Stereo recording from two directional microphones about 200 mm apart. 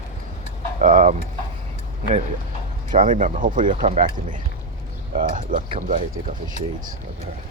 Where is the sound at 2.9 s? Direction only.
40° right (ahead or behind).